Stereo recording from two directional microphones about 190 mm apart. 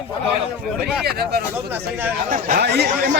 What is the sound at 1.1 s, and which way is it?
Speech, 55° right (ahead or behind).